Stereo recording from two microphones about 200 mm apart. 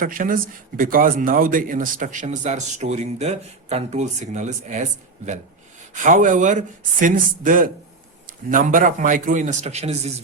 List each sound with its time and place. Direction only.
0.0 s speech: 45° right (ahead or behind)
5.9 s speech: 40° right (ahead or behind)